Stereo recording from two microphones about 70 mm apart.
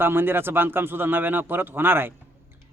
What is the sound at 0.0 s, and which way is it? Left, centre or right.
Speech, right.